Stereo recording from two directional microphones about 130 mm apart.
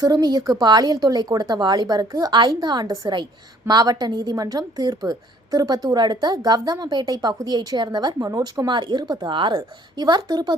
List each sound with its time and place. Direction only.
0.0 s a woman's voice: 30° right (ahead or behind)